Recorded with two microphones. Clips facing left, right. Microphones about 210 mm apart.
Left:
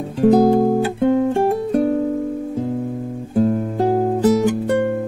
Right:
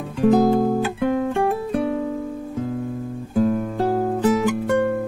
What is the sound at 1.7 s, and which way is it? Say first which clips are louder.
Music: left 5 dB; 45° left (ahead or behind).